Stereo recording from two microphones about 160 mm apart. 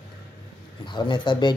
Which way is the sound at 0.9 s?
30° left (ahead or behind).